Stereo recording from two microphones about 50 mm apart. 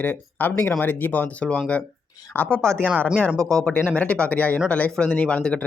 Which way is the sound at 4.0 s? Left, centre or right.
Left.